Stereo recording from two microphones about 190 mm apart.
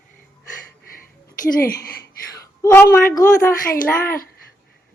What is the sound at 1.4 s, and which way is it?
Speech, 50° left (ahead or behind).